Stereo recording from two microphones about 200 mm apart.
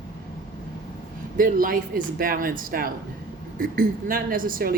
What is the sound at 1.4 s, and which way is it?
Speech, 45° right (ahead or behind).